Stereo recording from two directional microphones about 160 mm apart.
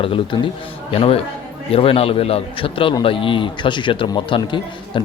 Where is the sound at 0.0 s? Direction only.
35° left (ahead or behind).